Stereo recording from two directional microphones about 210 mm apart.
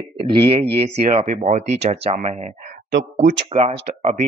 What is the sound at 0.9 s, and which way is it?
Speech, 35° right (ahead or behind).